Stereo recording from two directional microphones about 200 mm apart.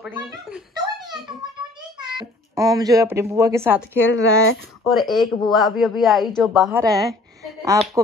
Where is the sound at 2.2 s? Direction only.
15° right (ahead or behind).